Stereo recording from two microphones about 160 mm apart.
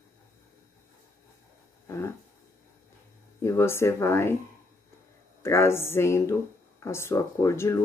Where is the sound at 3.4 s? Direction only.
15° left (ahead or behind).